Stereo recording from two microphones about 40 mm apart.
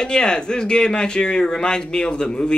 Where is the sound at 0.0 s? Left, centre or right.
Centre.